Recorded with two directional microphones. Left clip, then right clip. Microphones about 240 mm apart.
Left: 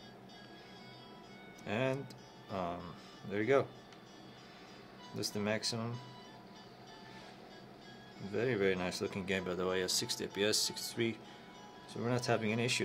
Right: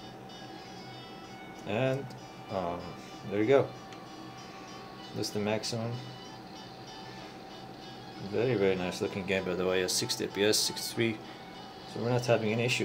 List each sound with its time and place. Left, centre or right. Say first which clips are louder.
1.7 s speech: right 5 dB; centre
3.3 s speech: right 6 dB; centre
5.2 s speech: right 4 dB; centre
8.3 s speech: right 5 dB; centre